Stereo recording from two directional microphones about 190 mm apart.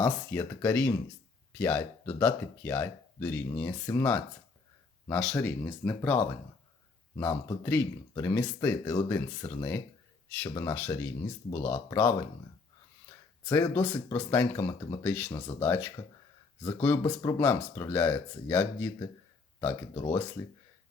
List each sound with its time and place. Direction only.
0.0 s speech: 10° left (ahead or behind)
13.5 s speech: 10° left (ahead or behind)
15.3 s speech: 25° left (ahead or behind)
15.6 s speech: 10° left (ahead or behind)
20.4 s speech: 15° left (ahead or behind)